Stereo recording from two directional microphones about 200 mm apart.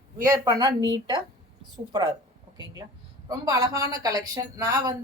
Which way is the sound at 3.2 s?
20° right (ahead or behind).